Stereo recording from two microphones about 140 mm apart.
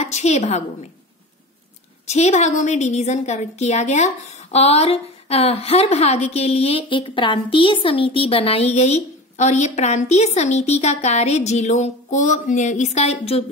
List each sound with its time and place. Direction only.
0.0 s a woman's voice: 55° left (ahead or behind)
2.0 s a woman's voice: 55° left (ahead or behind)